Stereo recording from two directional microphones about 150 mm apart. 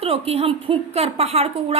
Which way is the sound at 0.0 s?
40° right (ahead or behind).